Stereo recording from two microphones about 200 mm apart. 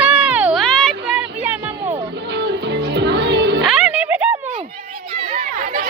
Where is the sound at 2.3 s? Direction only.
60° right (ahead or behind).